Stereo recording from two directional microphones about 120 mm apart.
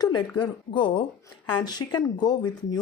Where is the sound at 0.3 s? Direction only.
40° left (ahead or behind).